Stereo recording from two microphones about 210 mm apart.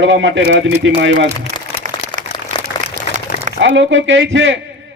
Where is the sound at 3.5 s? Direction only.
60° right (ahead or behind).